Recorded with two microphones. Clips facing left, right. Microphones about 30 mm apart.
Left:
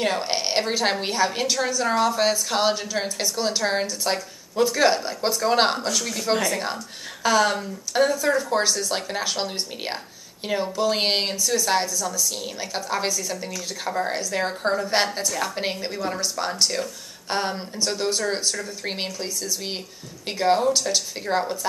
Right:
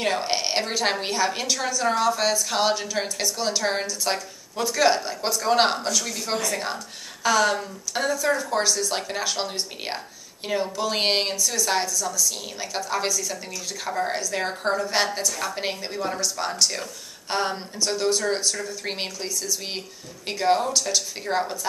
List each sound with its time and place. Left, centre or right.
0.2 s a woman's voice: centre
8.4 s a woman's voice: centre